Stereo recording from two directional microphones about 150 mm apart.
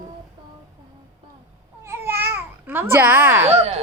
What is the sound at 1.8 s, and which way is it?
Babbling, 15° right (ahead or behind).